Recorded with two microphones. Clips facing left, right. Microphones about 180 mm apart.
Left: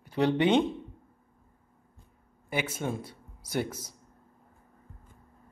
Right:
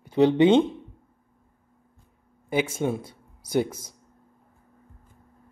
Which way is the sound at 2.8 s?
25° right (ahead or behind).